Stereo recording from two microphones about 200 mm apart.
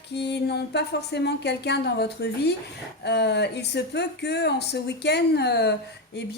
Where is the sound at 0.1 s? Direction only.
55° left (ahead or behind).